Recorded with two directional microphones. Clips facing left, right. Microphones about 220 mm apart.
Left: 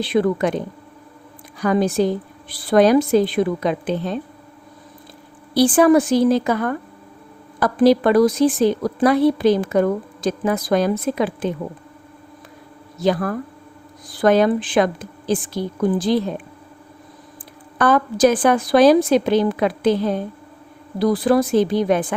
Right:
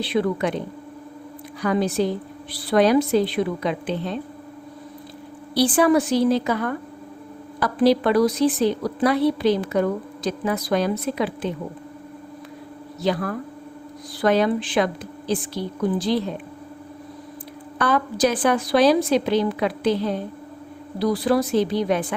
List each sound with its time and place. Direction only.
0.0 s a woman's voice: 50° left (ahead or behind)
1.6 s a woman's voice: 45° left (ahead or behind)
5.5 s a woman's voice: 45° left (ahead or behind)
13.0 s a woman's voice: 45° left (ahead or behind)
17.7 s a woman's voice: 50° left (ahead or behind)